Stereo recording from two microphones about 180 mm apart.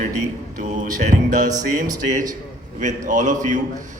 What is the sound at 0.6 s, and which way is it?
Music, 45° right (ahead or behind).